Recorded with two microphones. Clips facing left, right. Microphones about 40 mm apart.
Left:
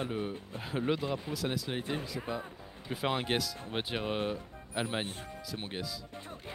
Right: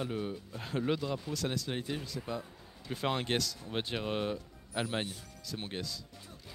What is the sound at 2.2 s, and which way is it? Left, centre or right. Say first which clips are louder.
Speech: left 2 dB; left.